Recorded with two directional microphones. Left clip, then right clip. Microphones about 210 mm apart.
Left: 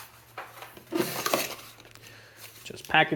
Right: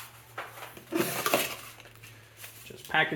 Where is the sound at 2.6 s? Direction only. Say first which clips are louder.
Left 4 dB; 45° left (ahead or behind).